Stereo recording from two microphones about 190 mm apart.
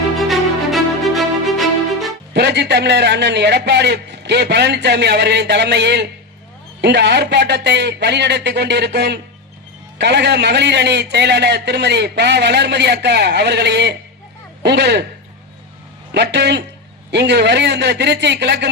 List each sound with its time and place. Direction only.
0.2 s music: centre (ahead or behind)
2.3 s a man's voice: 65° right (ahead or behind)
16.1 s a man's voice: 65° right (ahead or behind)